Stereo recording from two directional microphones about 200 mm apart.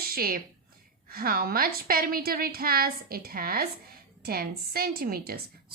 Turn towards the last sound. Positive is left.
turn(degrees=-50)  # may be behind; listen again after turning